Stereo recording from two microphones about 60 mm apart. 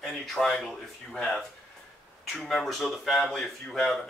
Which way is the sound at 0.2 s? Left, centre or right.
Centre.